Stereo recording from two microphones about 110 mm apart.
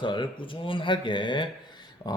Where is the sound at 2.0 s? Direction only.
40° left (ahead or behind).